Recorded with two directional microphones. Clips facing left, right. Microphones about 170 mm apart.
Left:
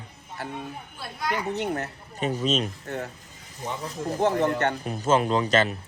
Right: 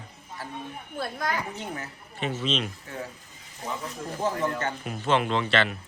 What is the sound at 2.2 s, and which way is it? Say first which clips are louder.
Speech: left 3 dB; 40° left (ahead or behind).